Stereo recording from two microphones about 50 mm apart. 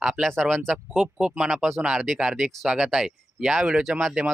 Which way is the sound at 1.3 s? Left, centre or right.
Centre.